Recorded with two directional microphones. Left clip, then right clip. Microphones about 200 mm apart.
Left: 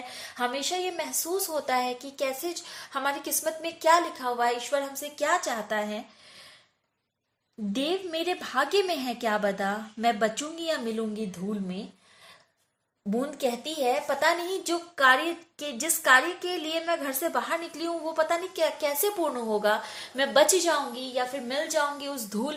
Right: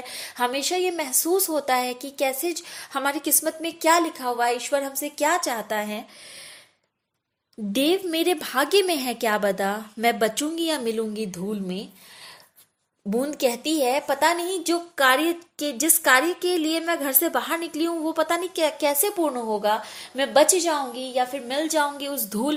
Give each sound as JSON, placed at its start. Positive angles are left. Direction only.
{"t": 0.1, "sound": "a woman's voice", "side_deg": -45}
{"t": 7.7, "sound": "a woman's voice", "side_deg": -45}
{"t": 13.1, "sound": "a woman's voice", "side_deg": -45}